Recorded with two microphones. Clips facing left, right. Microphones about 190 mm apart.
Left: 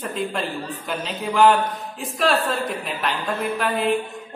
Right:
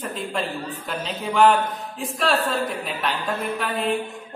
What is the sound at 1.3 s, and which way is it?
Speech, centre (ahead or behind).